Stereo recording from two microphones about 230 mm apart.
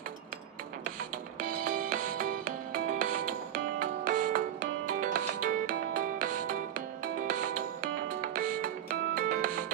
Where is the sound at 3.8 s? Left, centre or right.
Right.